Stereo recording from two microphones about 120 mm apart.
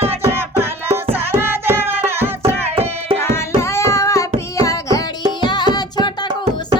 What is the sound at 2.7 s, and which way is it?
Music, 55° right (ahead or behind).